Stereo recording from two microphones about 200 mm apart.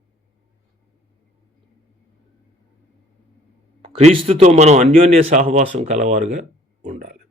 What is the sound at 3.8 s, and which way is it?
A man's voice, 30° right (ahead or behind).